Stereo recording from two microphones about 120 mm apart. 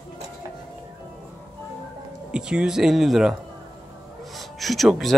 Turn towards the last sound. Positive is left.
turn(degrees=0)  # may be behind; listen again after turning